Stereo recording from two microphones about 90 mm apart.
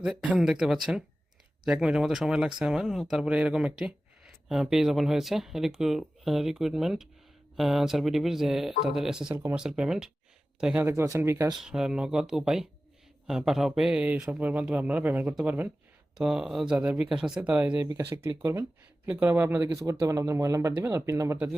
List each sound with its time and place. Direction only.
0.0 s speech: 5° right (ahead or behind)
10.8 s speech: 30° right (ahead or behind)
11.5 s speech: 5° right (ahead or behind); by 15.7 s 20° right (ahead or behind)
16.1 s speech: 5° right (ahead or behind)
18.0 s speech: 30° right (ahead or behind)
19.6 s speech: 40° right (ahead or behind)